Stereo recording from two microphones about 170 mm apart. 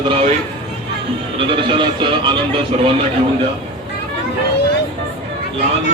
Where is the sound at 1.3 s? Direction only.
30° right (ahead or behind).